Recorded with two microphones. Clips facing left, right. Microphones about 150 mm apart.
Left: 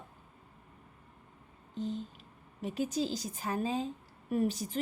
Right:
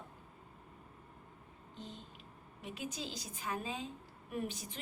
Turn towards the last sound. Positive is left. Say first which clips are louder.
# left 10 dB
turn(degrees=40)  # may be behind; listen again after turning